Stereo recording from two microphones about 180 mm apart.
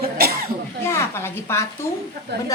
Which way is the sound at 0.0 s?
60° right (ahead or behind).